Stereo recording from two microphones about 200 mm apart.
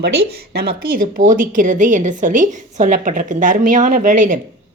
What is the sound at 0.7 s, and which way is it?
A woman's voice, 45° right (ahead or behind).